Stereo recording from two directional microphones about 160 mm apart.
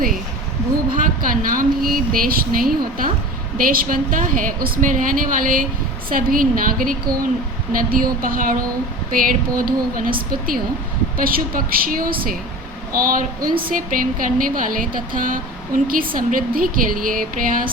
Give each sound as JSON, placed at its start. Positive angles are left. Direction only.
{"t": 0.9, "sound": "a woman's voice", "side_deg": -60}